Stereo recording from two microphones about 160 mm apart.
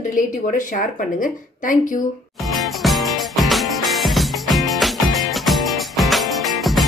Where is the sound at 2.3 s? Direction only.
Centre (ahead or behind).